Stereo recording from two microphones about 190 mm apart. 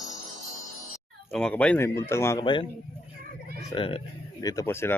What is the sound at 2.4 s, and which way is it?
Speech, 25° left (ahead or behind).